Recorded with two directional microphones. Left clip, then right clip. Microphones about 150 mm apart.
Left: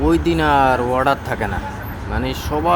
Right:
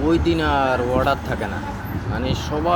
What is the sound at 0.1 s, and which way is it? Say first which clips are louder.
Speech: left 3 dB; 45° left (ahead or behind).